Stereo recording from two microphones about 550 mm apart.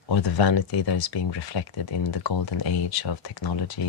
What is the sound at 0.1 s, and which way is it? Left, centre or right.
Speech, left.